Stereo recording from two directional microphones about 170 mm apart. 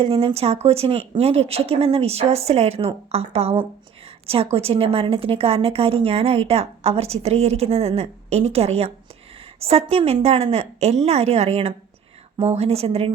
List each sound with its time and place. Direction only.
0.0 s a woman's voice: 30° right (ahead or behind)